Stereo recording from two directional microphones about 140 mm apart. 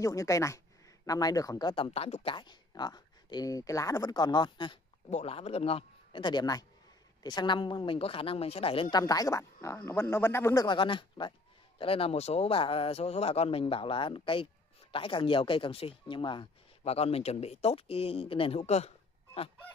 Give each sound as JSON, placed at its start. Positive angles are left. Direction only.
{"t": 0.0, "sound": "speech", "side_deg": 20}
{"t": 1.9, "sound": "speech", "side_deg": 50}
{"t": 2.3, "sound": "speech", "side_deg": 30}
{"t": 5.1, "sound": "speech", "side_deg": 45}
{"t": 8.9, "sound": "speech", "side_deg": 25}
{"t": 10.8, "sound": "speech", "side_deg": 35}
{"t": 16.8, "sound": "speech", "side_deg": 45}